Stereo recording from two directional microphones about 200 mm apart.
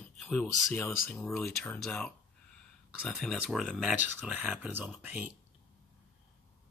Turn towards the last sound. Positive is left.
turn(degrees=-10)  # may be behind; listen again after turning